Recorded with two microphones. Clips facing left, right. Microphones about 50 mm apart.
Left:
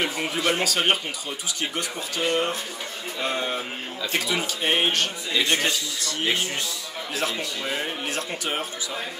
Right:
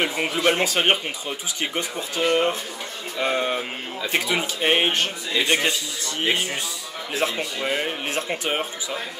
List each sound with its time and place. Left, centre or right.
0.0 s speech: right
7.2 s speech: right